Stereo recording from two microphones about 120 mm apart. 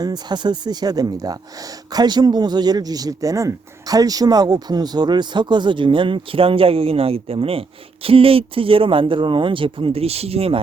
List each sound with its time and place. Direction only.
0.0 s speech: 35° right (ahead or behind); by 10.6 s 55° right (ahead or behind)